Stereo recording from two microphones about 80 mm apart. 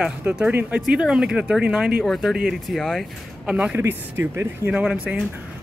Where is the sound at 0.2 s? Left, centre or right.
Right.